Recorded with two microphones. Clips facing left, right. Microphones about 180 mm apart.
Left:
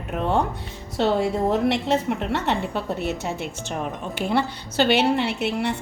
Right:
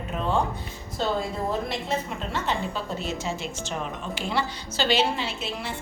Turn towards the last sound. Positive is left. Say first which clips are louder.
# left 8 dB
turn(degrees=70)  # may be behind; listen again after turning